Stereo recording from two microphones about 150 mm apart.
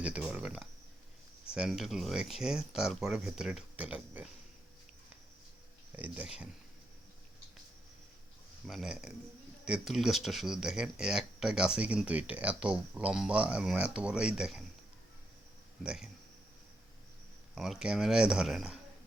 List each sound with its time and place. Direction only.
0.0 s speech: 5° right (ahead or behind)
6.0 s speech: 5° right (ahead or behind)
8.6 s speech: centre (ahead or behind)
15.8 s speech: 5° right (ahead or behind)
17.5 s speech: centre (ahead or behind)